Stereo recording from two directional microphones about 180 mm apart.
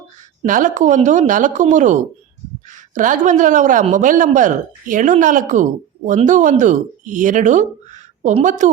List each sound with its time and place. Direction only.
0.4 s speech: 45° right (ahead or behind)